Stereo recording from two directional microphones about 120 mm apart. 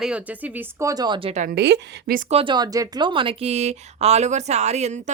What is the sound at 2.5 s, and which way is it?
Speech, 30° right (ahead or behind).